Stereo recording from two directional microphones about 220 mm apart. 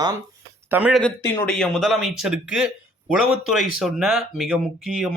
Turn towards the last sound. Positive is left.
turn(degrees=0)  # may be behind; listen again after turning